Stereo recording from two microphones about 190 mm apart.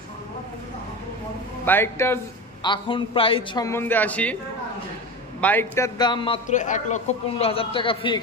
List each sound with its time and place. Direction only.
1.6 s a man's voice: 10° left (ahead or behind)
2.6 s a man's voice: 25° left (ahead or behind)
3.6 s a man's voice: 10° left (ahead or behind)
5.4 s a man's voice: 10° left (ahead or behind)
5.9 s a man's voice: 25° left (ahead or behind)
6.4 s a man's voice: 40° left (ahead or behind)